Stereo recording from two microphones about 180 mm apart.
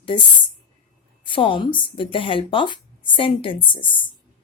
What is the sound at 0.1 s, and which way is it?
Speech, 25° left (ahead or behind).